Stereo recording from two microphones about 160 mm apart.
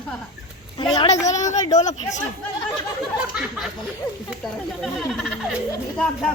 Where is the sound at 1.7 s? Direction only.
45° left (ahead or behind).